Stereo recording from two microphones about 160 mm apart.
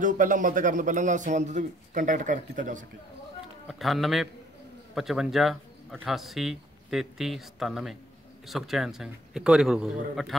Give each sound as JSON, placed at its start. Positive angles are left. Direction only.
{"t": 0.0, "sound": "a man's voice", "side_deg": -55}
{"t": 3.6, "sound": "speech", "side_deg": 0}